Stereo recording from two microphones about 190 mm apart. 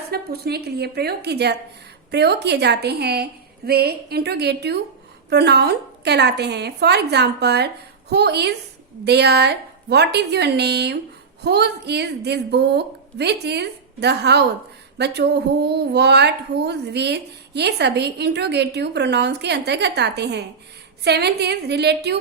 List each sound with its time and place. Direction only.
0.1 s a woman's voice: 55° right (ahead or behind)